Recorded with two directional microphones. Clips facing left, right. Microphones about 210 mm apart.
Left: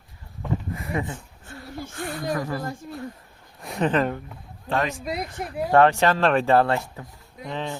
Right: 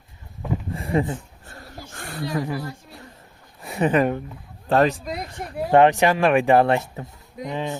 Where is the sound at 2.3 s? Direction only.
15° right (ahead or behind).